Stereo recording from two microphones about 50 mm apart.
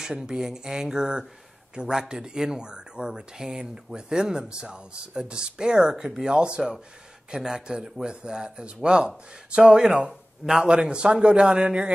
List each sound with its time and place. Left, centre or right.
0.0 s speech: centre